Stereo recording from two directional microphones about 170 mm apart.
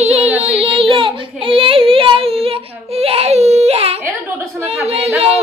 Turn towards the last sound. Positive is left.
turn(degrees=-35)  # may be behind; listen again after turning